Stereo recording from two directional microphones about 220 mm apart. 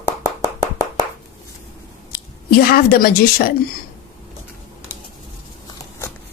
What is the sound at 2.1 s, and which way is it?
Speech, 45° left (ahead or behind).